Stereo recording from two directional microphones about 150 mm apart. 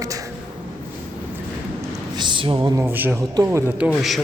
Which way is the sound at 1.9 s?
30° right (ahead or behind).